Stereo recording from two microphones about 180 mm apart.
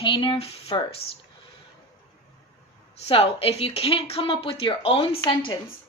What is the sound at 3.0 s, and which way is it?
Speech, 30° left (ahead or behind).